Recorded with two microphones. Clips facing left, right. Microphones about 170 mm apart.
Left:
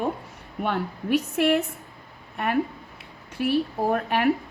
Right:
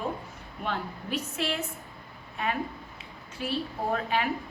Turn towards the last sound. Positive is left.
turn(degrees=60)  # may be behind; listen again after turning